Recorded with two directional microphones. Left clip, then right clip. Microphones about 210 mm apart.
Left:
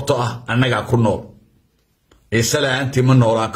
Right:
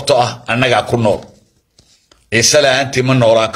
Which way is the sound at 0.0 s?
20° left (ahead or behind).